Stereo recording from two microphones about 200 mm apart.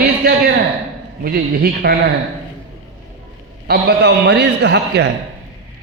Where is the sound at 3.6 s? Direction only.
55° right (ahead or behind).